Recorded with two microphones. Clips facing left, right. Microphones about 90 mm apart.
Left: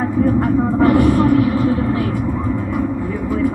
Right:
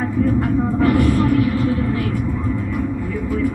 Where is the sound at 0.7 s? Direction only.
30° left (ahead or behind).